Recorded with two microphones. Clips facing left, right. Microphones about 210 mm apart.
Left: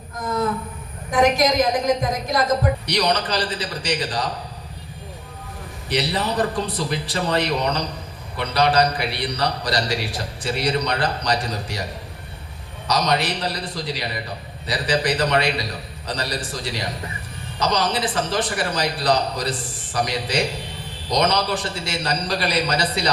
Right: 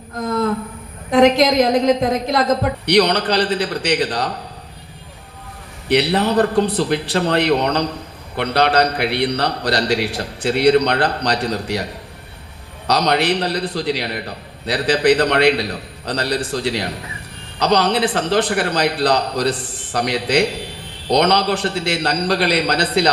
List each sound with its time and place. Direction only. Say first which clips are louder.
0.2 s a sound: right 4 dB; 60° right (ahead or behind)
1.1 s a man's voice: right 5 dB; 60° right (ahead or behind)
5.9 s a man's voice: right 7 dB; 60° right (ahead or behind)
12.9 s a man's voice: right 5 dB; 65° right (ahead or behind)